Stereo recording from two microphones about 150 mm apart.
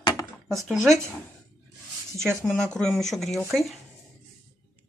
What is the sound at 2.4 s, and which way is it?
Speech, 5° left (ahead or behind).